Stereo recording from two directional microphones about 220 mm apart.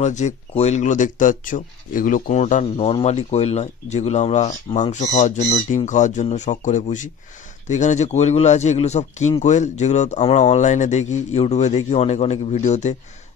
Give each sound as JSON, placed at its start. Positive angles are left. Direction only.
{"t": 0.0, "sound": "speech", "side_deg": 30}